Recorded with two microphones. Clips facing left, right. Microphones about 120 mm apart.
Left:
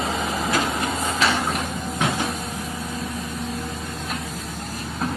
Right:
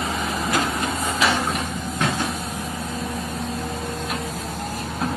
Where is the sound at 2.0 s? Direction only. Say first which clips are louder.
Even; 15° left (ahead or behind).